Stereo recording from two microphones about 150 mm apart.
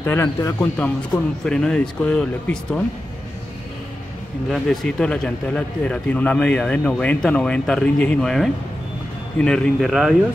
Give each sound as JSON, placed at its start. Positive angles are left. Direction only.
{"t": 0.0, "sound": "speech", "side_deg": 15}
{"t": 1.4, "sound": "speech", "side_deg": 5}
{"t": 4.5, "sound": "speech", "side_deg": 5}